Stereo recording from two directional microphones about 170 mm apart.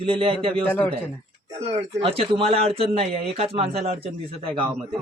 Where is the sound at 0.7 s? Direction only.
10° left (ahead or behind).